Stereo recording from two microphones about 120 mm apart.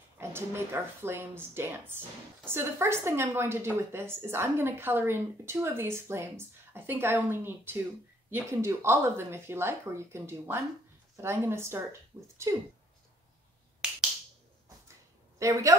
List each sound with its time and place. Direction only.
0.2 s a woman's voice: 20° right (ahead or behind)
15.3 s a woman's voice: 25° right (ahead or behind)